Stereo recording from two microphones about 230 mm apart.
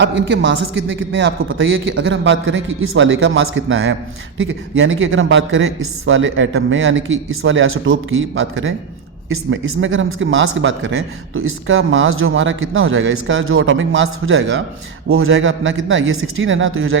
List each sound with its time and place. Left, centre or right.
0.0 s a man's voice: right